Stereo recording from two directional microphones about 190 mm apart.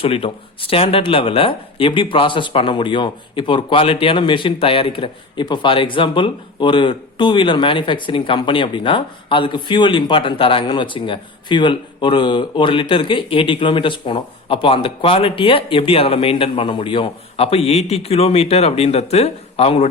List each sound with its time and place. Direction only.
0.0 s speech: 30° left (ahead or behind)